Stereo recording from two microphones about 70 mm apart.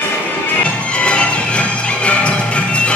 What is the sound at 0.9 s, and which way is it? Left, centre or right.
Music, centre.